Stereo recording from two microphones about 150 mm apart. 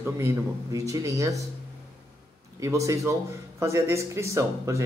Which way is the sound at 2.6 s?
20° right (ahead or behind).